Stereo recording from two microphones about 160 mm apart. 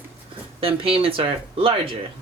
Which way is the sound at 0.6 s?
35° right (ahead or behind).